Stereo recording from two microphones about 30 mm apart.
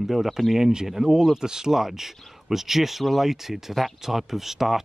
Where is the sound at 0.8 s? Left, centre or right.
Centre.